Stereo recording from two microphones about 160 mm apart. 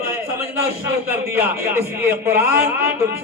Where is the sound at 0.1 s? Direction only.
15° right (ahead or behind).